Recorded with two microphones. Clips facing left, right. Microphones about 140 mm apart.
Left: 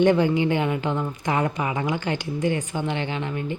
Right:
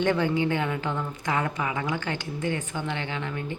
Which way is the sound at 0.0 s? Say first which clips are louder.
Left 5 dB; 15° left (ahead or behind).